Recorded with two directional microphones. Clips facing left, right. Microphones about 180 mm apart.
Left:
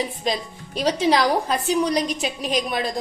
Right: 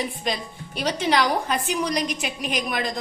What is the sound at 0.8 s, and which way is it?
A woman's voice, 35° left (ahead or behind).